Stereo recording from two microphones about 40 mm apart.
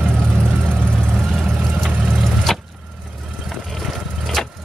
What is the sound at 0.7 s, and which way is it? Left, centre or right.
Vehicle, right.